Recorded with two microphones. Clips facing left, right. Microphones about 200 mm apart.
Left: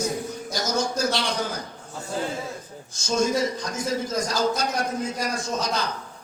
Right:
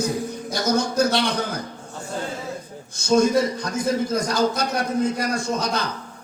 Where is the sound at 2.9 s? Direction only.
60° right (ahead or behind).